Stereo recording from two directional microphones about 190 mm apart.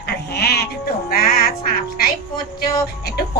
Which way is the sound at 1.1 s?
50° left (ahead or behind).